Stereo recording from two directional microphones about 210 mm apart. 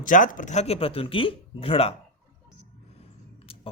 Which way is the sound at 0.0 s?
40° left (ahead or behind).